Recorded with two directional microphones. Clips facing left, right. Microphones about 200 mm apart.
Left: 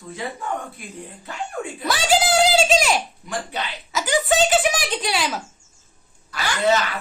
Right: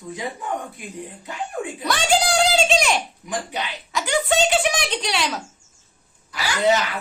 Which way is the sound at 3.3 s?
15° right (ahead or behind).